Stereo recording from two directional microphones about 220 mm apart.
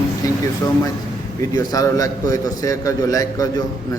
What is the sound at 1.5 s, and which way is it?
A man's voice, 15° left (ahead or behind).